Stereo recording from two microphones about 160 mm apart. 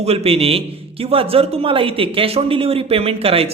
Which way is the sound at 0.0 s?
40° right (ahead or behind).